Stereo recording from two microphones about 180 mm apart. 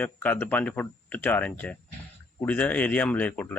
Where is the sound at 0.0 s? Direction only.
10° left (ahead or behind).